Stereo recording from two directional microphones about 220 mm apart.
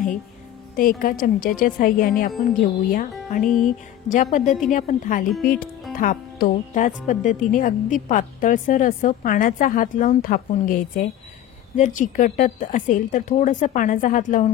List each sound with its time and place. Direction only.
0.7 s a woman's voice: 40° left (ahead or behind)
3.4 s speech: centre (ahead or behind)
4.1 s a woman's voice: 35° left (ahead or behind)